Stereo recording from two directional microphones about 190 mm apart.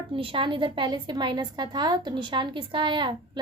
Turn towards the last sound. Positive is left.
turn(degrees=-25)  # may be behind; listen again after turning